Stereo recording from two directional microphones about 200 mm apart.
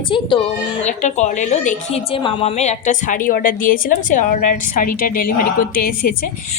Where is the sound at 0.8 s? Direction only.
35° left (ahead or behind).